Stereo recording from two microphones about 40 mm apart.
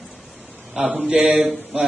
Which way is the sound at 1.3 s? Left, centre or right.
Centre.